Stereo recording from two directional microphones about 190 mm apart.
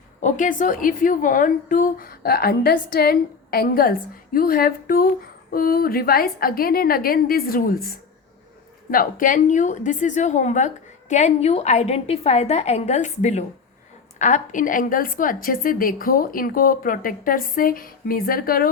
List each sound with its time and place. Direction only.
0.2 s a woman's voice: 40° left (ahead or behind)
8.9 s a woman's voice: 45° left (ahead or behind)